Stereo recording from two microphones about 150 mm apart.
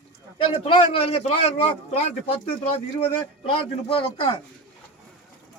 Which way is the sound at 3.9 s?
35° left (ahead or behind).